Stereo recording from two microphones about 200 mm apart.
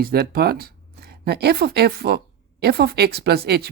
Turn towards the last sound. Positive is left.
turn(degrees=-55)  # may be behind; listen again after turning